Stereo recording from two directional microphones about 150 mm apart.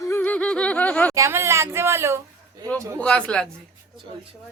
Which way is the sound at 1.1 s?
20° right (ahead or behind).